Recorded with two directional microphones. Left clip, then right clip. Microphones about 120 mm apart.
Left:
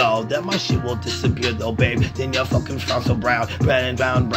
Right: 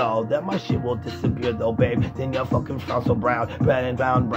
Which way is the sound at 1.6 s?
40° right (ahead or behind).